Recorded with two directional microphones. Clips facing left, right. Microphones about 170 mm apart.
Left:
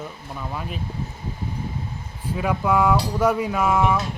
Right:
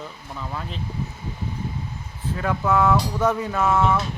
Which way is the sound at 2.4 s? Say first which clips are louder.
Left 1 dB; 10° left (ahead or behind).